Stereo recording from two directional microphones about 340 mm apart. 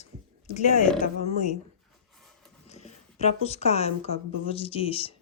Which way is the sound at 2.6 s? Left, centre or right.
Centre.